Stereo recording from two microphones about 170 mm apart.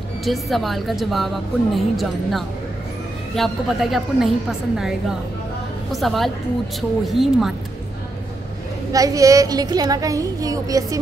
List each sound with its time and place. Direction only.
0.2 s a woman's voice: centre (ahead or behind)
8.9 s speech: 20° right (ahead or behind)